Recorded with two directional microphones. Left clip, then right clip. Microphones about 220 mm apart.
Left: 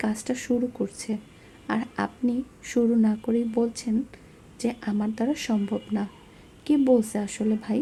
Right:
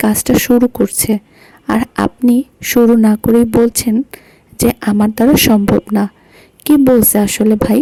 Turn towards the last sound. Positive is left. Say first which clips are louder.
# right 16 dB
turn(degrees=-45)  # may be behind; listen again after turning